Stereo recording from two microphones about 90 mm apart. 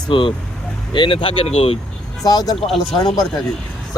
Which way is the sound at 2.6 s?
Centre (ahead or behind).